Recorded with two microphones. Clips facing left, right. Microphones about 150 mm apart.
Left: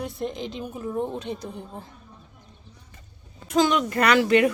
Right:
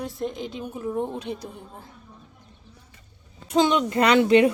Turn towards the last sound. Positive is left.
turn(degrees=-25)  # may be behind; listen again after turning